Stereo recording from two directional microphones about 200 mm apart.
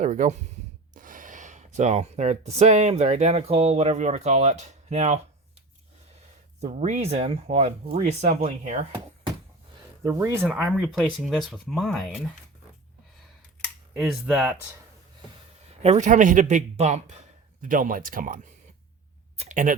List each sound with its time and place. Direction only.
0.0 s speech: 40° right (ahead or behind)
6.6 s speech: 35° right (ahead or behind)
10.0 s speech: 15° right (ahead or behind)
10.4 s speech: centre (ahead or behind)
14.0 s speech: 5° right (ahead or behind)
15.8 s speech: 35° right (ahead or behind)
19.4 s a sound: 40° right (ahead or behind)